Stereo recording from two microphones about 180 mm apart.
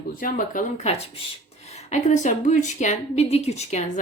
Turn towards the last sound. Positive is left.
turn(degrees=35)  # may be behind; listen again after turning